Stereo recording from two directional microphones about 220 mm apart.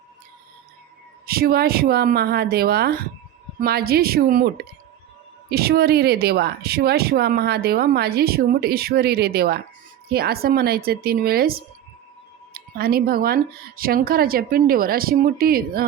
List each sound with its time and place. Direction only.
1.3 s speech: 45° right (ahead or behind)
5.5 s speech: 45° right (ahead or behind)